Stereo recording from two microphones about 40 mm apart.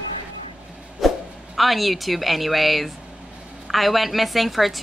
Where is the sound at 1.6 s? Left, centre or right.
Centre.